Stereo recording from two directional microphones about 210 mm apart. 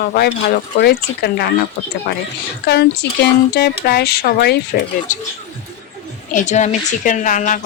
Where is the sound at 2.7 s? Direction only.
50° left (ahead or behind).